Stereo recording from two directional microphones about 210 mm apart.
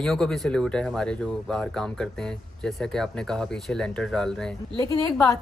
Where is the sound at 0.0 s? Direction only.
Centre (ahead or behind).